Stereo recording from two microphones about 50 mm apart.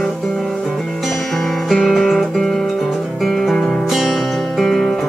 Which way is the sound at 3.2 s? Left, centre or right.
Centre.